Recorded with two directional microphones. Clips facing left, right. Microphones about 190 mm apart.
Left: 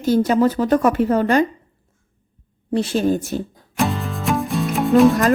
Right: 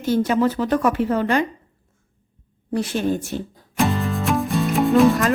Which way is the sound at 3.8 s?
Centre (ahead or behind).